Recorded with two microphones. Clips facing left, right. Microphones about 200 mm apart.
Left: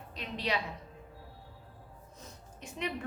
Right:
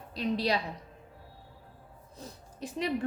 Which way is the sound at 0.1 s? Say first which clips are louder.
Right 6 dB; 35° right (ahead or behind).